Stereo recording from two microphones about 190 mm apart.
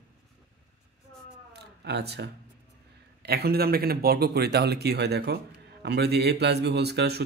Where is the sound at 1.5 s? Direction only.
60° right (ahead or behind).